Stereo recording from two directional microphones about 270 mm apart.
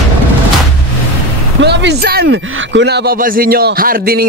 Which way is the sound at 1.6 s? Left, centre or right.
Right.